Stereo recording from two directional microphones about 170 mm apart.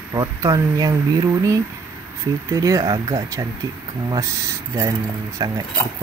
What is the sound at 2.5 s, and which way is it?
Speech, 20° right (ahead or behind).